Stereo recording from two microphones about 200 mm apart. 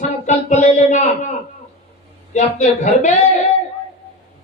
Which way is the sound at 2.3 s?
35° left (ahead or behind).